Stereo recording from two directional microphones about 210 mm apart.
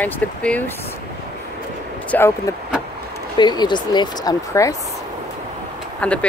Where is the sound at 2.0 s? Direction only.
10° left (ahead or behind).